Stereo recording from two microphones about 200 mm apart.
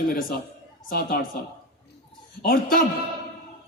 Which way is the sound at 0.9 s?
45° left (ahead or behind).